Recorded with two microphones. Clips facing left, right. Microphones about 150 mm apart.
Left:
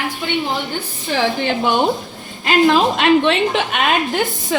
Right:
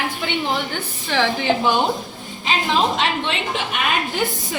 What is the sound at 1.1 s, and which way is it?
Speech, 55° left (ahead or behind).